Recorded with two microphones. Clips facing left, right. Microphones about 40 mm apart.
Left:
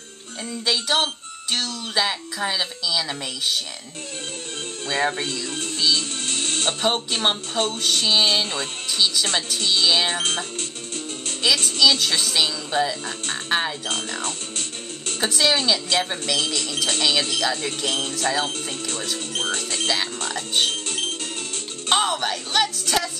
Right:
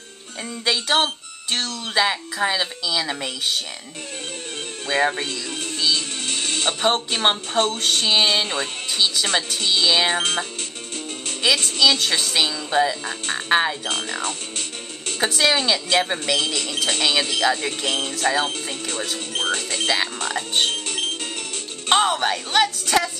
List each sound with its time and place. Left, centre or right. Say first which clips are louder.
0.7 s speech: right 2 dB; centre
5.0 s speech: even; centre
5.3 s music: even; right
7.1 s speech: right 2 dB; right
11.6 s speech: even; centre
13.8 s speech: right 2 dB; right
15.2 s speech: right 1 dB; centre; by 20.4 s right
20.7 s music: right 1 dB; right
21.9 s speech: right 3 dB; centre